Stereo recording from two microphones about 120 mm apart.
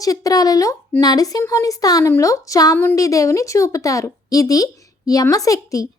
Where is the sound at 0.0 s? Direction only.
30° left (ahead or behind).